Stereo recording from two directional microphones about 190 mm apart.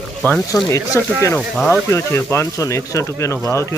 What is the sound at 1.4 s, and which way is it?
Speech, centre (ahead or behind).